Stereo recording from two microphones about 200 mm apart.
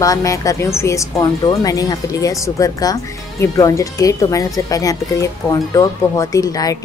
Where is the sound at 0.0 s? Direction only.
15° left (ahead or behind).